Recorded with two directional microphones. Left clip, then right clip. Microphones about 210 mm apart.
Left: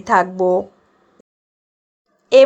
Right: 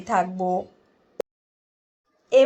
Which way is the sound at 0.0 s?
35° left (ahead or behind).